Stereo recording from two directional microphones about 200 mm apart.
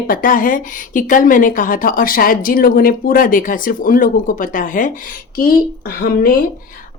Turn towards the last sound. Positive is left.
turn(degrees=45)  # may be behind; listen again after turning